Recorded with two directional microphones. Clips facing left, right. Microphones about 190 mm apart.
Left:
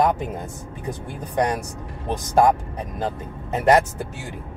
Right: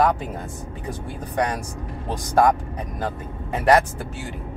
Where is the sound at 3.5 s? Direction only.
20° left (ahead or behind).